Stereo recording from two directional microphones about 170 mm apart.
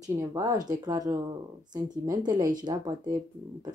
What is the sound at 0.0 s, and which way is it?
Speech, 20° right (ahead or behind).